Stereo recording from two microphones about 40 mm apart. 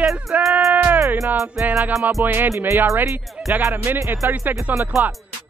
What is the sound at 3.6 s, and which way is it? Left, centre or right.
Speech, right.